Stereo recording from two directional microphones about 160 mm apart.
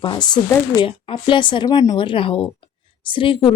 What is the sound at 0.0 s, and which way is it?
Speech, 30° left (ahead or behind).